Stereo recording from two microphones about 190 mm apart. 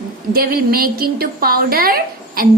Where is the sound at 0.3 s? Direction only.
50° right (ahead or behind).